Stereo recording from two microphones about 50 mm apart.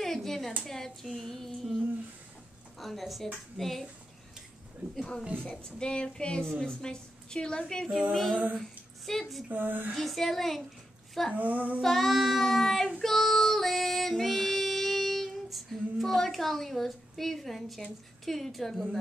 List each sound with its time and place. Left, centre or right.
0.0 s a sound: centre
0.7 s speech: centre
2.8 s speech: centre
5.6 s a woman's voice: centre
9.5 s female singing: right
9.9 s speech: centre
11.3 s female singing: right
11.8 s speech: centre
13.0 s child singing: centre
18.2 s speech: centre